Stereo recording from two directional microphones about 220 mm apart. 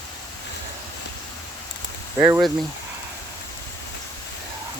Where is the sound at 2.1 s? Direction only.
10° right (ahead or behind).